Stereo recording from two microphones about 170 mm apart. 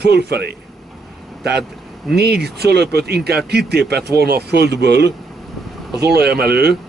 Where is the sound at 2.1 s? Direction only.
70° right (ahead or behind).